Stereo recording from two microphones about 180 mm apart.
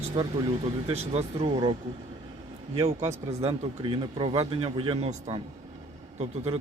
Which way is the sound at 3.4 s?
30° right (ahead or behind).